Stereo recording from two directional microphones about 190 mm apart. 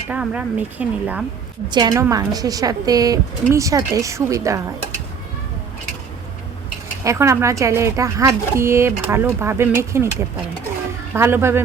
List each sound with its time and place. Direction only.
0.1 s speech: 10° right (ahead or behind)
1.7 s a woman's voice: 20° right (ahead or behind)
7.0 s speech: 15° right (ahead or behind)